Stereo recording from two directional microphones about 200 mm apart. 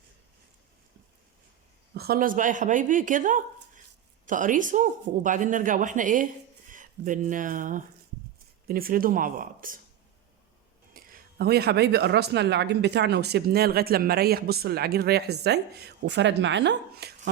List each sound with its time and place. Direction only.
1.9 s speech: 50° right (ahead or behind)
10.9 s speech: 45° right (ahead or behind)